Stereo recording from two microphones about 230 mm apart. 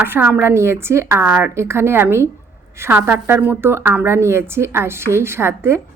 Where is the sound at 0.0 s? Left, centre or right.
Centre.